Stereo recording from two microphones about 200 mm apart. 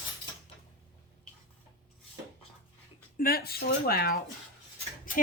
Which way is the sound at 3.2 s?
50° left (ahead or behind).